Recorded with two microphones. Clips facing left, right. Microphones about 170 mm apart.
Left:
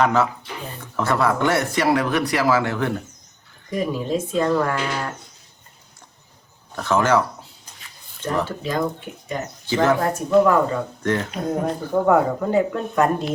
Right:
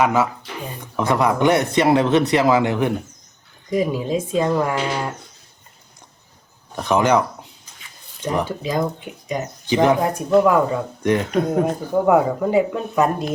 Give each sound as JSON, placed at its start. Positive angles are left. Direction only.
{"t": 0.0, "sound": "speech", "side_deg": -10}
{"t": 6.7, "sound": "speech", "side_deg": -15}